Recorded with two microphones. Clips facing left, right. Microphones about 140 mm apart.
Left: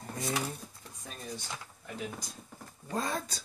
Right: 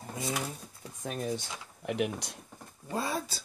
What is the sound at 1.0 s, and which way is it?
Speech, 75° right (ahead or behind).